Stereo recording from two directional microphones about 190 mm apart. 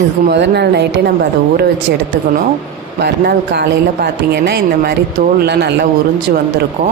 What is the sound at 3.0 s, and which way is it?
Speech, 60° right (ahead or behind).